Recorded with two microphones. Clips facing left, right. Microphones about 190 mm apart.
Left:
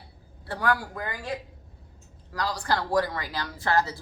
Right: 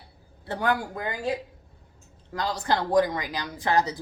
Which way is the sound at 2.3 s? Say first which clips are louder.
Right 2 dB; 25° right (ahead or behind).